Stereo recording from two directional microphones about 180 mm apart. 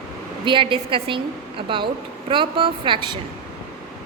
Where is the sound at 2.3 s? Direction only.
30° right (ahead or behind).